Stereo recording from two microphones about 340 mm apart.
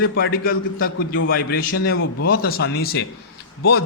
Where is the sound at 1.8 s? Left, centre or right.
Left.